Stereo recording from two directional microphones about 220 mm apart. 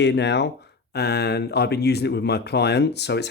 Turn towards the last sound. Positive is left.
turn(degrees=50)  # may be behind; listen again after turning